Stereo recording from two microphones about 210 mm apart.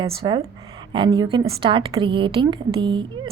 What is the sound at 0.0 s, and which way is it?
A woman's voice, 20° right (ahead or behind).